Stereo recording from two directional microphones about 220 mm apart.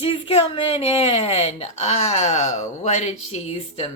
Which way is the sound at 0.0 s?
25° left (ahead or behind).